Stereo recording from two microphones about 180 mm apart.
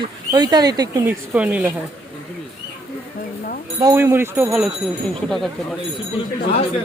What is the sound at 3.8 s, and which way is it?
Speech, 15° right (ahead or behind).